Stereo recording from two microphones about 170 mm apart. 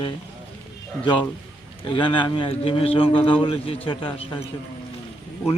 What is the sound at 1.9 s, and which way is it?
A man's voice, 30° left (ahead or behind).